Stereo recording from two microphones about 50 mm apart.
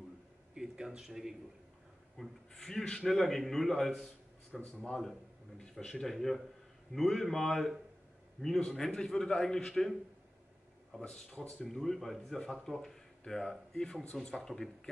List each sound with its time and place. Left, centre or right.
0.6 s speech: centre
2.1 s a man's voice: centre
10.9 s a man's voice: centre
11.2 s a man's voice: centre